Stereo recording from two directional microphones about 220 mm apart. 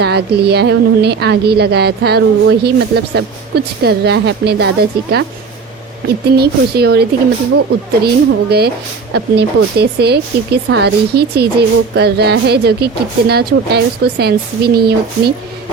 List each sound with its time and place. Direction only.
0.0 s speech: 50° right (ahead or behind)
6.2 s speech: 45° right (ahead or behind)